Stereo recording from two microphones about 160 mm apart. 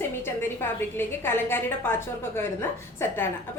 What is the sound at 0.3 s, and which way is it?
A woman's voice, 15° left (ahead or behind).